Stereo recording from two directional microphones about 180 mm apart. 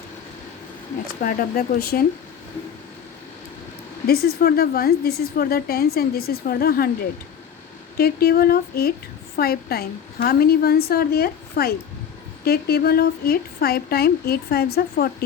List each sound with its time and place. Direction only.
1.2 s a woman's voice: 55° left (ahead or behind)
4.0 s a woman's voice: 60° left (ahead or behind)